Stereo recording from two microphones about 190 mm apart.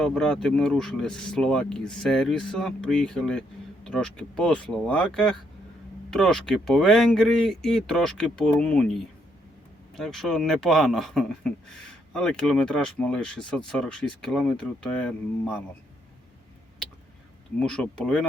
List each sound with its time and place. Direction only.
0.0 s speech: 5° left (ahead or behind)
10.0 s speech: centre (ahead or behind)
17.6 s speech: 5° left (ahead or behind)